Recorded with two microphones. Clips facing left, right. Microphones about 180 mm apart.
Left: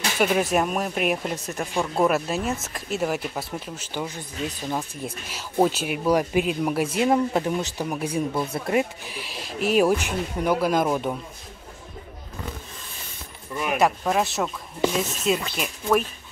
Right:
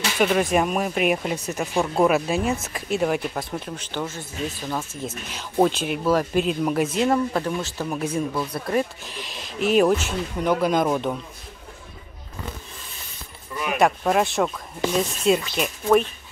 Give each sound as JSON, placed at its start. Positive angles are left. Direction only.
{"t": 0.2, "sound": "speech", "side_deg": 5}
{"t": 5.3, "sound": "speech", "side_deg": 5}
{"t": 8.3, "sound": "speech", "side_deg": 25}
{"t": 8.7, "sound": "speech", "side_deg": 10}
{"t": 13.6, "sound": "speech", "side_deg": 0}
{"t": 15.5, "sound": "speech", "side_deg": 0}